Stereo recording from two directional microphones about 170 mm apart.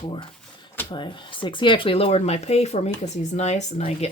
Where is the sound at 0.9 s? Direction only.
30° left (ahead or behind).